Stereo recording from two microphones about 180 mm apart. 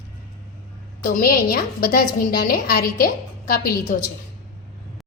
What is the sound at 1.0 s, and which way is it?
A woman's voice, 50° left (ahead or behind).